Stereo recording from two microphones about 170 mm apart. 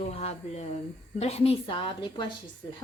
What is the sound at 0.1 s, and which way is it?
Speech, 40° left (ahead or behind).